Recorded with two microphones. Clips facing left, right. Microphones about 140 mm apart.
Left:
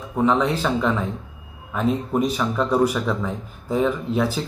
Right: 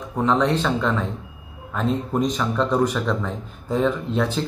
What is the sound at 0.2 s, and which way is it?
Speech, 10° left (ahead or behind).